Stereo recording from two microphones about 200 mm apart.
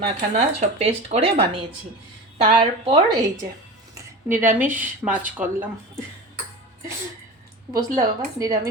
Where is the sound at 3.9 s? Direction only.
10° right (ahead or behind).